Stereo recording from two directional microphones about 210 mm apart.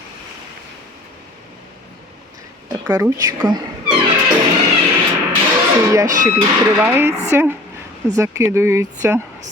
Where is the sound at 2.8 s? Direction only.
15° right (ahead or behind).